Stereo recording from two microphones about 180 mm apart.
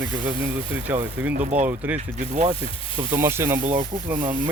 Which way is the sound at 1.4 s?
40° right (ahead or behind).